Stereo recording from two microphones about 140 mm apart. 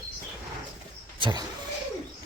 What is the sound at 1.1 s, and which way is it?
Vehicle, 35° right (ahead or behind).